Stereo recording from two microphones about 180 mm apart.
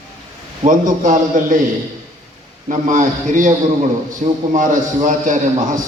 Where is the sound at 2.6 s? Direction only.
45° right (ahead or behind).